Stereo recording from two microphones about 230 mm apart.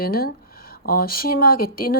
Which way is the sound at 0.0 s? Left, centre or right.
Left.